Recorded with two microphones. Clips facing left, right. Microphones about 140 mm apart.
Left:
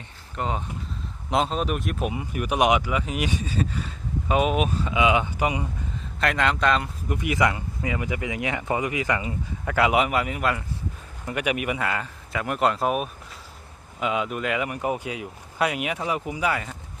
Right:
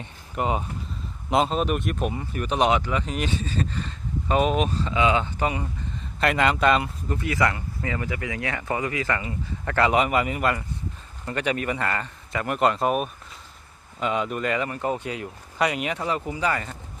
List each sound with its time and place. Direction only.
0.3 s speech: 10° right (ahead or behind); by 5.6 s 15° left (ahead or behind)
6.1 s speech: centre (ahead or behind)
7.1 s speech: 15° left (ahead or behind); by 10.6 s centre (ahead or behind)
11.3 s speech: 10° left (ahead or behind)